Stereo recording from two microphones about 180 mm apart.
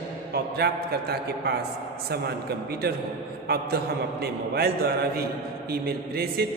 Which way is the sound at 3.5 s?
60° right (ahead or behind).